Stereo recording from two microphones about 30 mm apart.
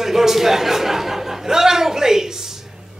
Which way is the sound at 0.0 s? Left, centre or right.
Centre.